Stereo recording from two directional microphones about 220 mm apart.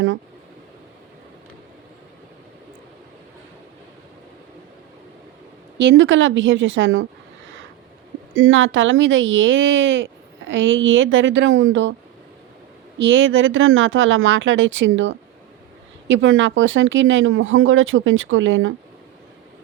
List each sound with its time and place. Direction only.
5.7 s speech: 55° right (ahead or behind)
8.4 s speech: 65° right (ahead or behind)
13.0 s speech: 60° right (ahead or behind)